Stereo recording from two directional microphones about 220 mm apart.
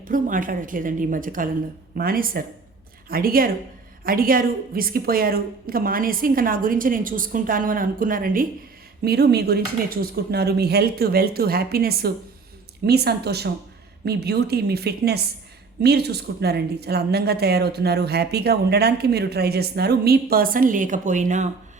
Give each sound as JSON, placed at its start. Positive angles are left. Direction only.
{"t": 0.0, "sound": "a woman's voice", "side_deg": -40}